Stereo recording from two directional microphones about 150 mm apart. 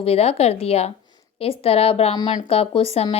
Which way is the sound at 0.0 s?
40° left (ahead or behind).